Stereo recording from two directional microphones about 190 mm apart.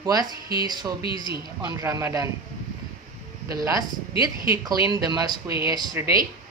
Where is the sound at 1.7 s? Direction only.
20° right (ahead or behind).